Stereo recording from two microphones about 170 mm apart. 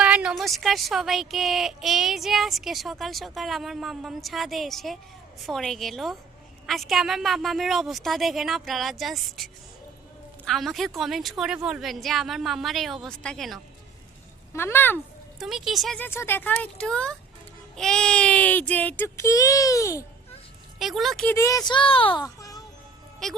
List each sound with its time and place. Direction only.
0.0 s speech: 5° right (ahead or behind)
14.5 s speech: 15° left (ahead or behind)
15.4 s speech: centre (ahead or behind)
16.0 s speech: 15° left (ahead or behind)
20.7 s speech: centre (ahead or behind)
21.3 s speech: 20° left (ahead or behind)